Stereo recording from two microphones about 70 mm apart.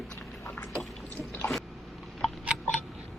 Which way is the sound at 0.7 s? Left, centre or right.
Centre.